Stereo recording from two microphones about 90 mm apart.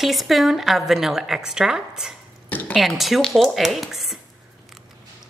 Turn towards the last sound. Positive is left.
turn(degrees=0)  # may be behind; listen again after turning